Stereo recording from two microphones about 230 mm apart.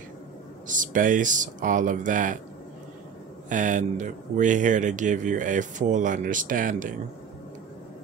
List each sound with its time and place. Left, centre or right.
0.7 s speech: right
3.4 s speech: right